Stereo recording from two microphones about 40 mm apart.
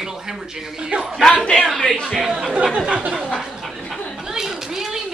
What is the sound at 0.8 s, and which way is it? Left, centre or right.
Speech, right.